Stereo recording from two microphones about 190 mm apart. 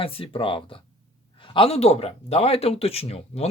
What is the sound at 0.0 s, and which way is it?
Speech, 30° left (ahead or behind).